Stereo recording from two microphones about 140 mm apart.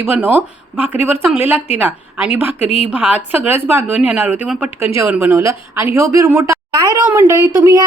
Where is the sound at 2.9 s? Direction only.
10° right (ahead or behind).